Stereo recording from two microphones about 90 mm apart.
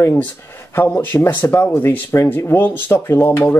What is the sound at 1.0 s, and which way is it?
Speech, 20° left (ahead or behind).